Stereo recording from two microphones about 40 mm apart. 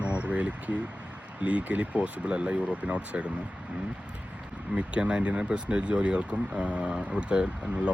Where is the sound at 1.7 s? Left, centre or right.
Right.